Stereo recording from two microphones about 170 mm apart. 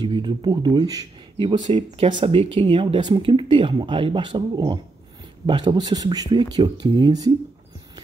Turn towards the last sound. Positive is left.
turn(degrees=-25)  # may be behind; listen again after turning